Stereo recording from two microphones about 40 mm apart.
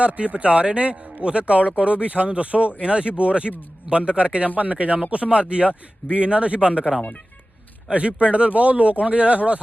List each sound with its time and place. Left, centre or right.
0.0 s a man's voice: right